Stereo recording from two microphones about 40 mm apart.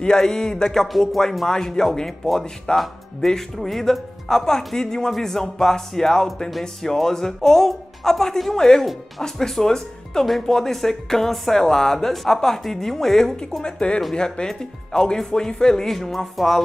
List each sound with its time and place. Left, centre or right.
0.0 s speech: centre
0.8 s speech: centre
1.5 s speech: centre